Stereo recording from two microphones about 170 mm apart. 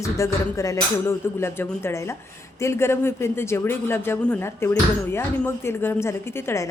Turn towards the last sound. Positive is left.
turn(degrees=15)  # may be behind; listen again after turning